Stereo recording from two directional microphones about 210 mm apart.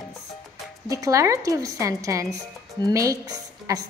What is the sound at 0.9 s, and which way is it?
A woman's voice, 15° right (ahead or behind).